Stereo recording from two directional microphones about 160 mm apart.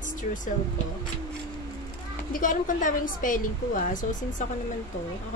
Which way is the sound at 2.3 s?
55° left (ahead or behind).